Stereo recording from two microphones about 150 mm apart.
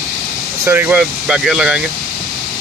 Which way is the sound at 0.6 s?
15° right (ahead or behind).